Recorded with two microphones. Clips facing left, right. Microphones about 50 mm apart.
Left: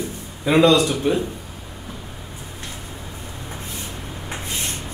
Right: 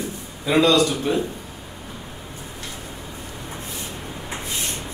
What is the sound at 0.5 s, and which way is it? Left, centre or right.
Speech, left.